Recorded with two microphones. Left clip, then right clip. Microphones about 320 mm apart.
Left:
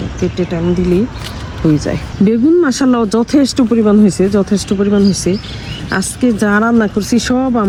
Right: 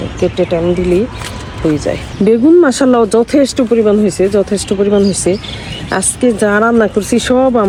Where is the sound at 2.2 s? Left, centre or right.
Centre.